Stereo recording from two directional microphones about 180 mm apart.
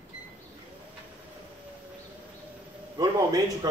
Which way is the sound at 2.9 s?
20° right (ahead or behind).